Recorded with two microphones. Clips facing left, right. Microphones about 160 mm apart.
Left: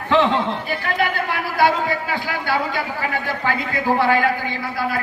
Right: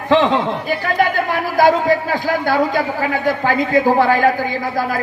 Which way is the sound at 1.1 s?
45° right (ahead or behind).